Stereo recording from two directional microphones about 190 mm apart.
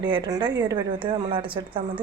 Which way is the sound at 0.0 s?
25° right (ahead or behind).